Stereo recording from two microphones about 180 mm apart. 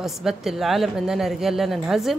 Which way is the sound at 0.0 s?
5° right (ahead or behind).